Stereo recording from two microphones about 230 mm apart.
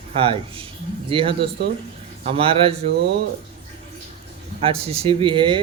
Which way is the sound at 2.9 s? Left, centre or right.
Right.